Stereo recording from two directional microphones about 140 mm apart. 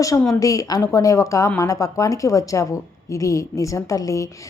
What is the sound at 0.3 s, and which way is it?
A woman's voice, 25° left (ahead or behind).